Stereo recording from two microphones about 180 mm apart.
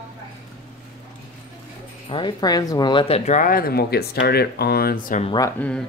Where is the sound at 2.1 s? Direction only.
25° left (ahead or behind).